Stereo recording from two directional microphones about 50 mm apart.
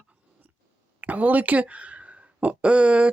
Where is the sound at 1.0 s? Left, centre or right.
Right.